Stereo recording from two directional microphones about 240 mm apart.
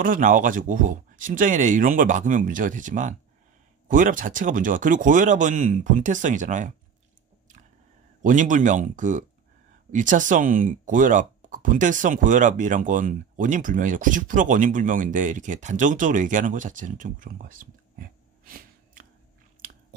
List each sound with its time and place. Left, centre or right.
0.0 s speech: right
8.2 s speech: right